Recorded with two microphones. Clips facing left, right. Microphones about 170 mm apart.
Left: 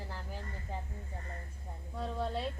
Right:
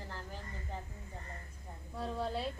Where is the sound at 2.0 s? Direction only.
Centre (ahead or behind).